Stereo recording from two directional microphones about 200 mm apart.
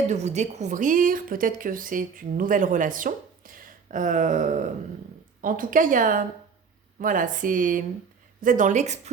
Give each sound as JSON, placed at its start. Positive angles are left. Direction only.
{"t": 0.1, "sound": "a woman's voice", "side_deg": -35}